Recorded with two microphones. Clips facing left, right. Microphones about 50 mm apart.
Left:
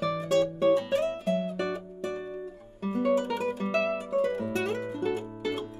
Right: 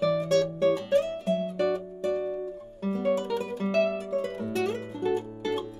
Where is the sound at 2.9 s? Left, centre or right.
Left.